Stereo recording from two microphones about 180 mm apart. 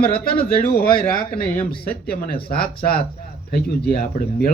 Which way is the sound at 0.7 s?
55° left (ahead or behind).